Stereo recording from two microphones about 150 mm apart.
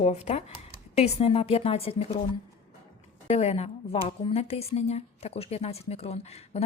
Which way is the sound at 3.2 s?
45° left (ahead or behind).